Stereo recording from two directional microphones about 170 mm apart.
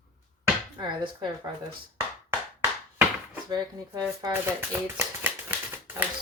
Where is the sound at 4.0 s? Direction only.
15° right (ahead or behind).